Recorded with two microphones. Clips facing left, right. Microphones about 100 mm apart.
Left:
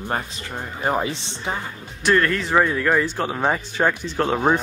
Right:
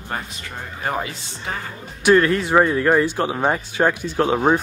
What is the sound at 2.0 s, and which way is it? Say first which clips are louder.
Speech: right 4 dB; 10° right (ahead or behind).